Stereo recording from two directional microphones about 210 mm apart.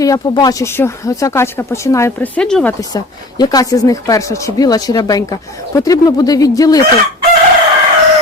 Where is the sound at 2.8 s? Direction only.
20° left (ahead or behind).